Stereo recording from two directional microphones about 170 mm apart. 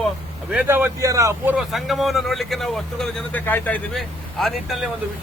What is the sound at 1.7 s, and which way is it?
Speech, centre (ahead or behind).